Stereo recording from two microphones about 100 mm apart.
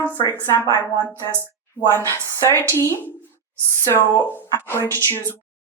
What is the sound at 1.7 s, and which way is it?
Speech, 20° left (ahead or behind).